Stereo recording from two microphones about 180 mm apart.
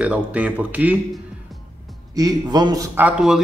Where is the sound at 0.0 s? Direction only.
5° right (ahead or behind).